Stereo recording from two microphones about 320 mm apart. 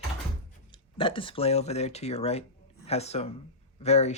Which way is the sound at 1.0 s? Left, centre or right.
Centre.